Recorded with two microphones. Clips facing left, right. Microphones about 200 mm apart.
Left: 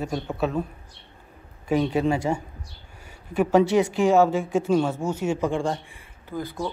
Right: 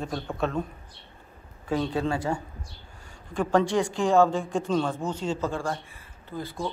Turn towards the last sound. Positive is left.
turn(degrees=15)  # may be behind; listen again after turning